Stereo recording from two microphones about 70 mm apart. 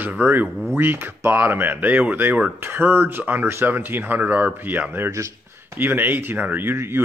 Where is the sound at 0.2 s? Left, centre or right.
Right.